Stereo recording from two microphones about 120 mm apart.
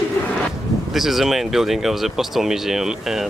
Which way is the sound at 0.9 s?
Centre (ahead or behind).